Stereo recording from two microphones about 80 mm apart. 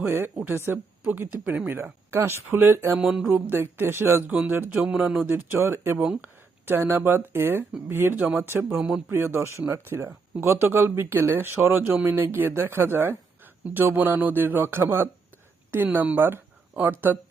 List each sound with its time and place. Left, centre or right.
0.0 s speech: right
3.0 s a sound: centre
3.2 s speech: right
4.3 s speech: centre
4.9 s speech: centre
5.3 s speech: right